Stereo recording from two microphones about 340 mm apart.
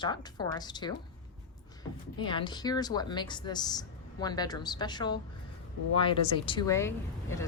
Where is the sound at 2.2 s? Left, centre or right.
Centre.